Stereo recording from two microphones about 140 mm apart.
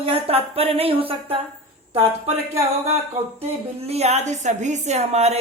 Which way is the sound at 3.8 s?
50° right (ahead or behind).